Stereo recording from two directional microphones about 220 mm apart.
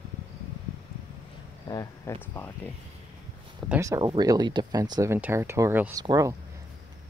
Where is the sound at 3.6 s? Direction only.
15° right (ahead or behind).